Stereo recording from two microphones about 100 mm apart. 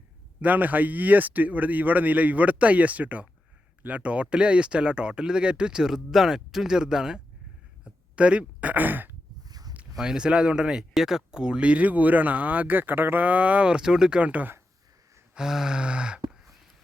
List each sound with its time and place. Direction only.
0.4 s speech: 15° right (ahead or behind)
9.4 s a sound: 40° right (ahead or behind)
10.0 s speech: 5° right (ahead or behind)
15.4 s speech: 5° right (ahead or behind)